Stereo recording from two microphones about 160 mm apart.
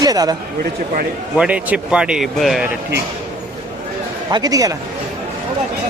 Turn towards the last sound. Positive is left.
turn(degrees=-20)  # may be behind; listen again after turning